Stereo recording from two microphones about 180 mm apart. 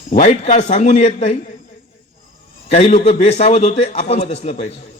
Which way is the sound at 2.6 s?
35° left (ahead or behind).